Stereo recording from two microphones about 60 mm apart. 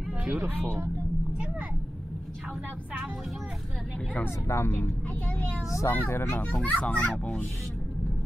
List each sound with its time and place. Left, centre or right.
0.2 s speech: right
4.5 s speech: left
5.9 s speech: left
6.4 s a child's voice: left